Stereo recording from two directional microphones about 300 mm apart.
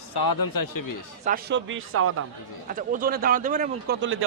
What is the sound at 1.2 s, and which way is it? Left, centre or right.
Speech, right.